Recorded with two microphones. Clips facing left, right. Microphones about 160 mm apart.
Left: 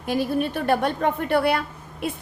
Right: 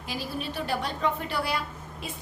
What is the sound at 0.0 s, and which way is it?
A woman's voice, 55° left (ahead or behind).